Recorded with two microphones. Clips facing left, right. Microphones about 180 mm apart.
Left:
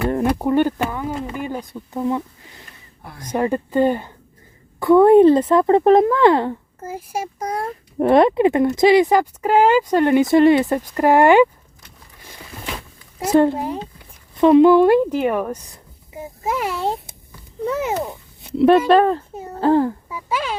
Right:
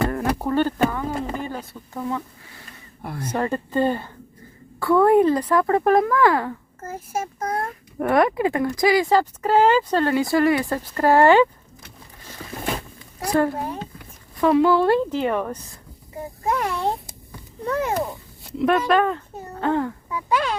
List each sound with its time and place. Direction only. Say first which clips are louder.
0.1 s a woman's voice: left 5 dB; 20° left (ahead or behind)
6.7 s a woman's voice: left 2 dB; 10° left (ahead or behind)
7.9 s speech: left 5 dB; 25° left (ahead or behind)
13.1 s a woman's voice: left 6 dB; 20° left (ahead or behind); by 18.5 s centre (ahead or behind)
18.9 s speech: left 5 dB; 35° left (ahead or behind)
20.1 s speech: right 2 dB; 5° left (ahead or behind)